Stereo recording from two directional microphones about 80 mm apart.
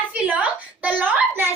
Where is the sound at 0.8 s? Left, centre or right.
Centre.